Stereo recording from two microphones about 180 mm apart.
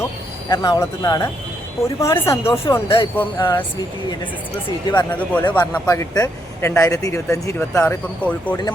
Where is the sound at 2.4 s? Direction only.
30° left (ahead or behind).